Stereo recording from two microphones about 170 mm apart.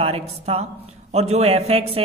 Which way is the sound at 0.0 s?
35° right (ahead or behind).